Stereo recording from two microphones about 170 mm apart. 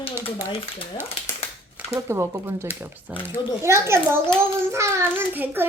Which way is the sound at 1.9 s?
15° right (ahead or behind).